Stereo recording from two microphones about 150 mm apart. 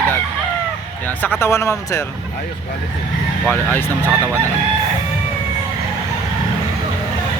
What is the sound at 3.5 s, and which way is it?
Speech, 10° left (ahead or behind).